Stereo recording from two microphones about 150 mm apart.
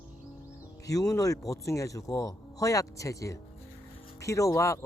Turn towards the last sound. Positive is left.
turn(degrees=20)  # may be behind; listen again after turning